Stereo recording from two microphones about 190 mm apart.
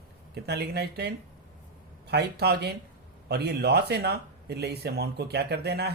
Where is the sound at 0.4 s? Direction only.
60° right (ahead or behind).